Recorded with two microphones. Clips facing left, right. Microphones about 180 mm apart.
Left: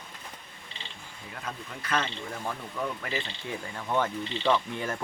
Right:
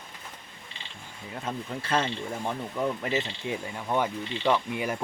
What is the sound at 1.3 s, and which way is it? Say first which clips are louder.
Speech: right 6 dB; 25° right (ahead or behind).